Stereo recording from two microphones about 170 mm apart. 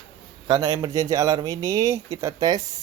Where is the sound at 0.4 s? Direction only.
25° right (ahead or behind).